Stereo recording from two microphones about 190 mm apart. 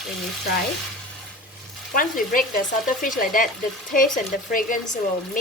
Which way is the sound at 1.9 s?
45° left (ahead or behind).